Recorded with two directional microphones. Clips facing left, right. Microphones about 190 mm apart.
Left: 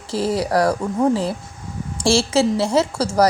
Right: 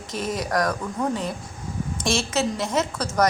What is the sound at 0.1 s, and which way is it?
A woman's voice, 30° left (ahead or behind).